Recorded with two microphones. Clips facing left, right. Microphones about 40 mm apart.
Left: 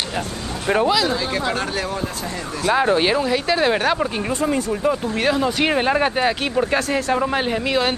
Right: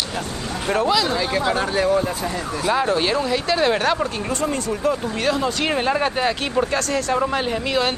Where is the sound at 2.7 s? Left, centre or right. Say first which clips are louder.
Left 3 dB; centre.